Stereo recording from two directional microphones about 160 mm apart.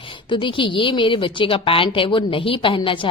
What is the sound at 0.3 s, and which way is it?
A woman's voice, 30° left (ahead or behind).